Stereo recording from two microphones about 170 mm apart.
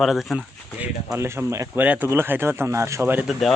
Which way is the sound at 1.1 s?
15° right (ahead or behind).